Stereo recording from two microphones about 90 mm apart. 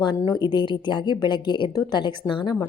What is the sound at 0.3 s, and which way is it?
A woman's voice, 55° left (ahead or behind).